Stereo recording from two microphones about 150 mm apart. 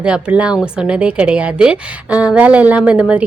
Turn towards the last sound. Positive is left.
turn(degrees=-10)  # may be behind; listen again after turning